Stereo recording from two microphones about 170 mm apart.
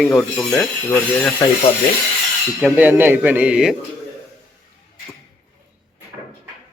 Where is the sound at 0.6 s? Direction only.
15° left (ahead or behind).